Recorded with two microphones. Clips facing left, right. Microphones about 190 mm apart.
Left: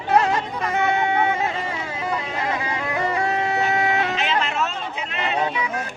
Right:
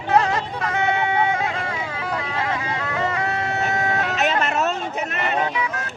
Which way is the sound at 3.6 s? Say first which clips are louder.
Even; 45° right (ahead or behind).